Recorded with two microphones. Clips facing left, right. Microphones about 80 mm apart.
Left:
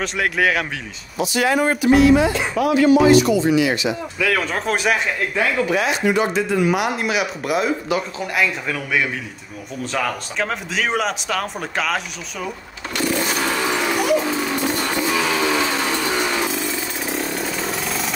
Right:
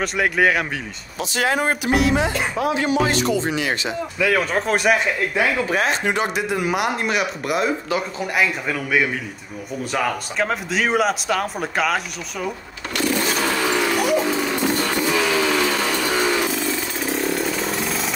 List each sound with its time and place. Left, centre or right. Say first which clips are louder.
0.0 s speech: right 1 dB; centre
1.3 s speech: left 2 dB; right
1.7 s music: left 6 dB; centre
2.1 s speech: left 3 dB; right
2.5 s music: left 5 dB; right
3.1 s speech: left 7 dB; right
4.2 s speech: right 2 dB; centre
5.7 s speech: left 2 dB; right
6.3 s speech: left 3 dB; centre
12.9 s vehicle: even; centre
13.9 s a sound: even; centre
15.2 s a sound: even; centre
17.1 s chainsaw: right 3 dB; centre